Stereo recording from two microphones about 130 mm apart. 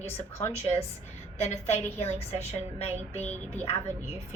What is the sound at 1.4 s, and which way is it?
A woman's voice, 60° left (ahead or behind).